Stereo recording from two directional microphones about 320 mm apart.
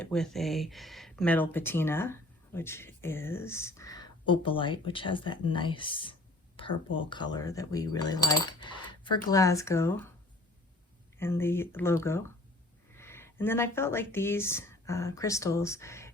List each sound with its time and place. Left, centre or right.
0.0 s speech: centre
6.6 s whispering: centre
6.9 s speech: centre
11.2 s speech: centre